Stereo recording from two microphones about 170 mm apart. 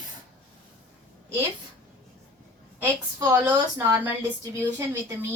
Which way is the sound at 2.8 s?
20° right (ahead or behind).